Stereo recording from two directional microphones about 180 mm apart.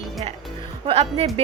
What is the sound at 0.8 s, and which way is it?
Speech, 35° right (ahead or behind).